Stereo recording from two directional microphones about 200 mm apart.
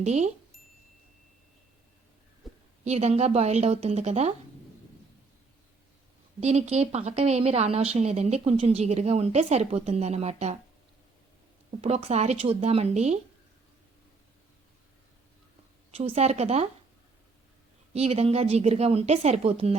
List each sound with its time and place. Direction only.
0.0 s a woman's voice: 35° right (ahead or behind)
2.4 s a sound: centre (ahead or behind)
2.8 s a woman's voice: 35° right (ahead or behind)
6.4 s a woman's voice: 35° right (ahead or behind)
11.8 s a woman's voice: 35° right (ahead or behind)
15.9 s a woman's voice: 30° right (ahead or behind)
17.9 s a woman's voice: 30° right (ahead or behind)